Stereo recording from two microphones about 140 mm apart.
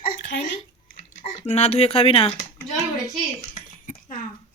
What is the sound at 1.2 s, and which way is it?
Speech, 55° left (ahead or behind).